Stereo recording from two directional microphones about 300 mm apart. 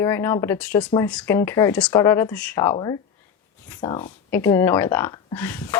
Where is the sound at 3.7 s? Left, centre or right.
Centre.